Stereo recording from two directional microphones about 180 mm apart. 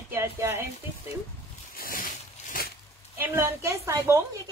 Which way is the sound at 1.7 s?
50° left (ahead or behind).